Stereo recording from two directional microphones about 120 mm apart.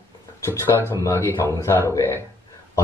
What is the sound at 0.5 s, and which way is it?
Speech, 20° left (ahead or behind).